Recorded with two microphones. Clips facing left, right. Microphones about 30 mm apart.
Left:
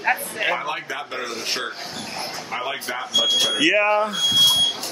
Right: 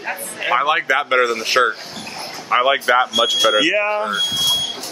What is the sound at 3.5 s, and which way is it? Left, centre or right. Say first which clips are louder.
Speech: right 1 dB; centre.